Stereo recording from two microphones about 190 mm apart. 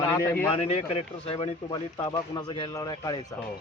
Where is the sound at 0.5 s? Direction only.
35° left (ahead or behind).